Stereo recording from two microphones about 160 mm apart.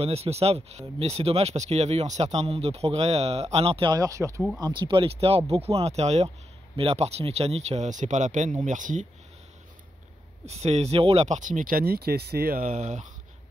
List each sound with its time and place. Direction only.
0.0 s speech: 40° right (ahead or behind)
3.9 s speech: 20° right (ahead or behind); by 9.0 s 50° right (ahead or behind)
10.4 s speech: 40° right (ahead or behind)